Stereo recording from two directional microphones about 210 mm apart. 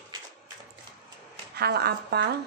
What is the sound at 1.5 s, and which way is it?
Speech, 50° right (ahead or behind).